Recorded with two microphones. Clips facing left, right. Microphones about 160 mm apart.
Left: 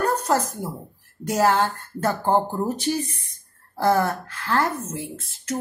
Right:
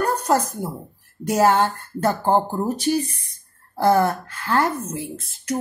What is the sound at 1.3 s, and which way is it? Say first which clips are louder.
Speech: right 3 dB; 20° right (ahead or behind).